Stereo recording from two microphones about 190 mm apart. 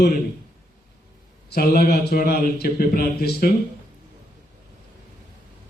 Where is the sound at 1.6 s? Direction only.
50° left (ahead or behind).